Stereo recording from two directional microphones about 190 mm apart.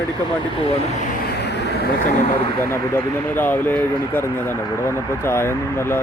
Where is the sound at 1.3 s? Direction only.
65° left (ahead or behind).